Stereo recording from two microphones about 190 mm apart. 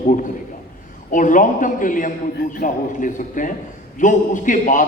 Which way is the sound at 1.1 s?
45° left (ahead or behind).